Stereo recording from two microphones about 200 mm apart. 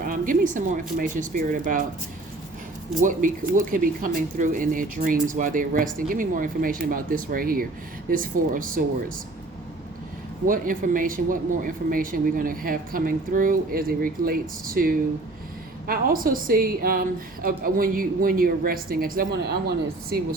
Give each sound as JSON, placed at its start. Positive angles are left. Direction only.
{"t": 0.0, "sound": "speech", "side_deg": -45}
{"t": 3.0, "sound": "speech", "side_deg": -40}
{"t": 10.4, "sound": "speech", "side_deg": -45}